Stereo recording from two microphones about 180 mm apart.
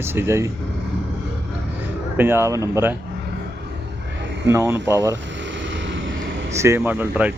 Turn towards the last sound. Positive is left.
turn(degrees=-10)  # may be behind; listen again after turning